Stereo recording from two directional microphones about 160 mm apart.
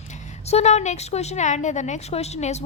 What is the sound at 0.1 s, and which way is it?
A woman's voice, 45° left (ahead or behind).